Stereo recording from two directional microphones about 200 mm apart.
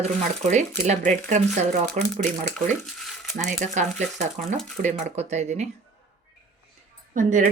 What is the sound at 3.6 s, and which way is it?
Speech, 35° right (ahead or behind).